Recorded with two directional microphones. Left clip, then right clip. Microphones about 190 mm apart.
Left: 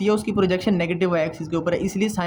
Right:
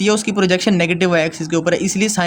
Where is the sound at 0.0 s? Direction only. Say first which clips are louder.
Right 4 dB; 50° right (ahead or behind).